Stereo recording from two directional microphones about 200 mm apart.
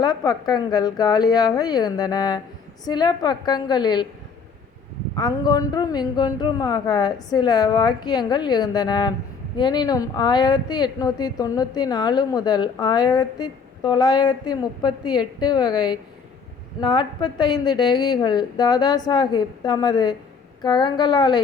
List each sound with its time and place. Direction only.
0.0 s a woman's voice: 20° left (ahead or behind)
5.1 s a woman's voice: 20° left (ahead or behind)